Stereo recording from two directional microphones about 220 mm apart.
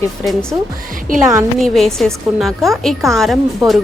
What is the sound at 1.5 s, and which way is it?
A woman's voice, centre (ahead or behind).